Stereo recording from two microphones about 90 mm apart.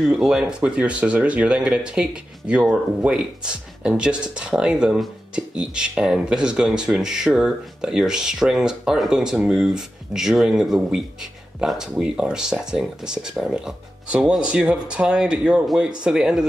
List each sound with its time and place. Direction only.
0.0 s speech: 5° right (ahead or behind)